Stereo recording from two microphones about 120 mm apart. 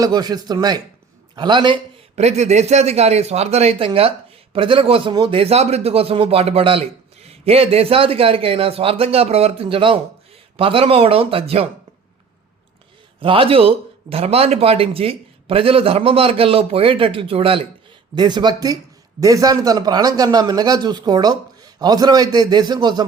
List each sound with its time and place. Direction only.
0.0 s a man's voice: 35° right (ahead or behind)
2.1 s a man's voice: 65° right (ahead or behind)
13.1 s a man's voice: 45° right (ahead or behind)
18.1 s a man's voice: 35° right (ahead or behind)